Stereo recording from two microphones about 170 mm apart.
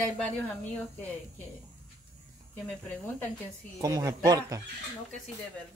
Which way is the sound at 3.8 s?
20° right (ahead or behind).